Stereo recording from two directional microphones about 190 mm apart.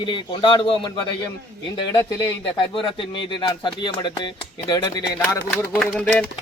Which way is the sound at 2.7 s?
25° left (ahead or behind).